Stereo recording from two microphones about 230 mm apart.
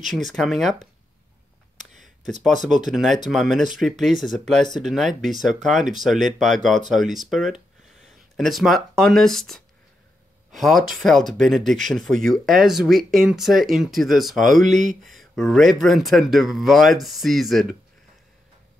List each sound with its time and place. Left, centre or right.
0.1 s speech: centre
1.8 s a sound: right
2.7 s speech: centre
14.4 s speech: right
14.8 s speech: centre